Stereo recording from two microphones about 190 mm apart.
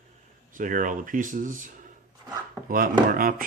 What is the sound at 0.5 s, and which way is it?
Speech, 45° right (ahead or behind).